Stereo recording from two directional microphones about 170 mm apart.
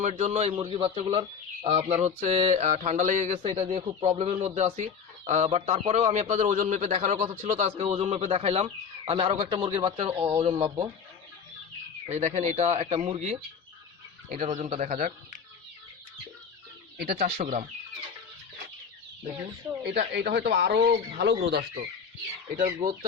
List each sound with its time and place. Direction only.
0.0 s speech: 40° right (ahead or behind)
12.0 s speech: 40° right (ahead or behind)
14.9 s speech: 50° right (ahead or behind)
17.0 s speech: 60° right (ahead or behind)
17.2 s speech: 35° right (ahead or behind)
19.8 s speech: 85° right
21.2 s speech: 85° right
22.5 s speech: 50° right (ahead or behind)